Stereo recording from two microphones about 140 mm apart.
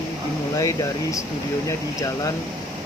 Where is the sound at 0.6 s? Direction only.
25° left (ahead or behind).